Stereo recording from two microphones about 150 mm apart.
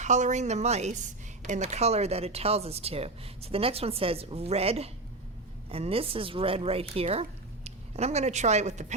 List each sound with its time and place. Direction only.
0.0 s a woman's voice: 55° right (ahead or behind)